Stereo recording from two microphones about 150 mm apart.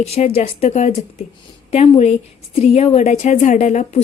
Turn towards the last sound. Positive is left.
turn(degrees=50)  # may be behind; listen again after turning